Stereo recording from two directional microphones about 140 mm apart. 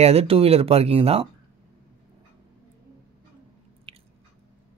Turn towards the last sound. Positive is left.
turn(degrees=-45)  # may be behind; listen again after turning